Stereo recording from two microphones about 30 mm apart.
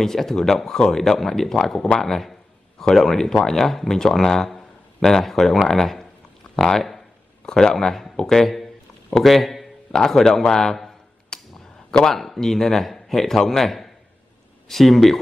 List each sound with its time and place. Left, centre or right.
0.0 s speech: centre
7.4 s a man's voice: left; by 9.7 s centre
9.8 s speech: centre
10.5 s a sound: centre
12.1 s speech: centre